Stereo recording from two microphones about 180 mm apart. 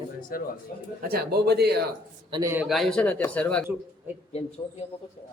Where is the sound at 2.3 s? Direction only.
25° right (ahead or behind).